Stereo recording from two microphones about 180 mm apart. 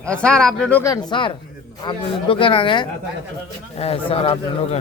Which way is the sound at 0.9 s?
25° left (ahead or behind).